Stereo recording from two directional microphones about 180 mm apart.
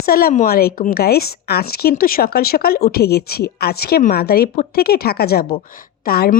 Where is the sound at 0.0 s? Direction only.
55° left (ahead or behind).